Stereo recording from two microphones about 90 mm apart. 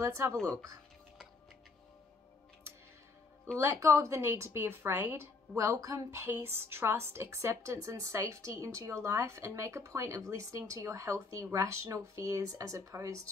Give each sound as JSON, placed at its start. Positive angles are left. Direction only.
{"t": 0.0, "sound": "a woman's voice", "side_deg": -35}
{"t": 3.5, "sound": "a woman's voice", "side_deg": -30}
{"t": 5.6, "sound": "a woman's voice", "side_deg": -35}